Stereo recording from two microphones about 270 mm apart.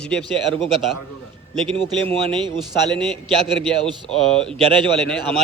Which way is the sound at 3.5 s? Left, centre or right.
Centre.